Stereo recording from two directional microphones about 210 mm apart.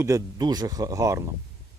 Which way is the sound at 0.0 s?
15° right (ahead or behind).